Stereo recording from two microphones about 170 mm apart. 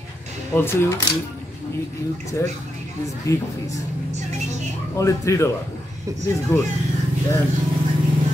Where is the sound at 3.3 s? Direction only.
20° left (ahead or behind).